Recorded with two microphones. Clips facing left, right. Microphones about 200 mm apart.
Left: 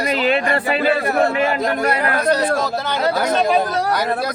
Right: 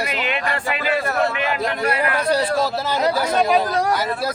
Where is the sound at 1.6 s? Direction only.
45° left (ahead or behind).